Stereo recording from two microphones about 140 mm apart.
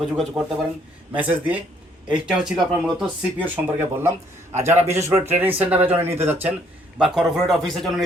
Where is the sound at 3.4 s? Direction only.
15° right (ahead or behind).